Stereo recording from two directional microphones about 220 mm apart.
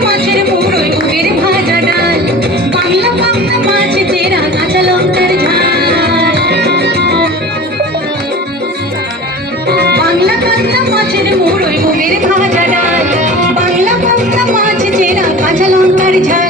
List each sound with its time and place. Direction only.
0.0 s music: 45° right (ahead or behind)
9.6 s music: 45° right (ahead or behind)
10.9 s a sound: 45° right (ahead or behind)
14.5 s music: 35° right (ahead or behind)